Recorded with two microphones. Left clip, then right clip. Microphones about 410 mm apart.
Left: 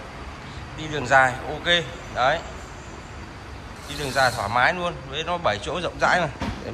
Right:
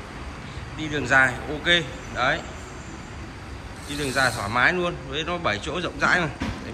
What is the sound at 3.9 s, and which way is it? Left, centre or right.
Speech, left.